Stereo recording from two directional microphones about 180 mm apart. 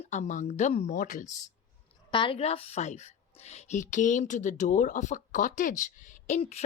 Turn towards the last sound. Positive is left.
turn(degrees=40)  # may be behind; listen again after turning